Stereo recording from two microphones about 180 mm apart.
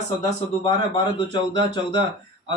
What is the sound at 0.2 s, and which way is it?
A man's voice, 25° left (ahead or behind).